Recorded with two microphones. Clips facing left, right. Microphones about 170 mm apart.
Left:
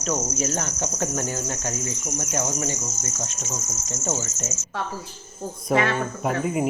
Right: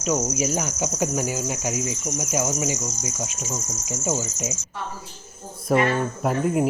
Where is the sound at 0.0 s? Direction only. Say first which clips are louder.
Right 3 dB; 10° right (ahead or behind).